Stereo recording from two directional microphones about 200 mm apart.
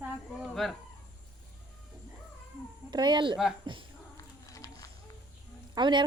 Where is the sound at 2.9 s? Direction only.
20° right (ahead or behind).